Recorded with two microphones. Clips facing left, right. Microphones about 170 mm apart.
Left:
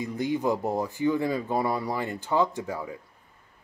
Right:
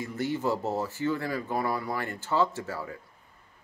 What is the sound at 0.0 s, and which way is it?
Speech, 15° left (ahead or behind).